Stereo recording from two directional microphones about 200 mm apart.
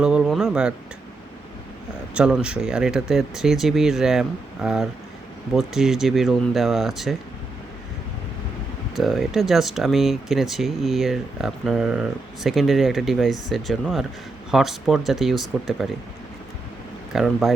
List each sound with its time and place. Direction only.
0.0 s speech: 5° right (ahead or behind)
2.1 s speech: 5° right (ahead or behind)
9.0 s speech: centre (ahead or behind)
17.1 s speech: centre (ahead or behind)